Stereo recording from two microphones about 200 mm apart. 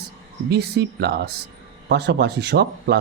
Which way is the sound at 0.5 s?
55° right (ahead or behind).